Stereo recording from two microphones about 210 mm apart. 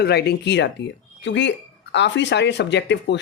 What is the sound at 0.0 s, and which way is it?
Speech, 50° left (ahead or behind).